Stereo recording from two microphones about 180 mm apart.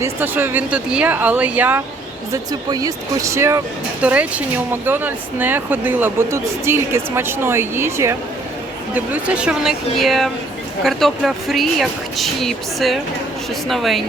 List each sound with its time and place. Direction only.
0.0 s speech: 10° right (ahead or behind)
2.3 s speech: 20° right (ahead or behind); by 14.0 s centre (ahead or behind)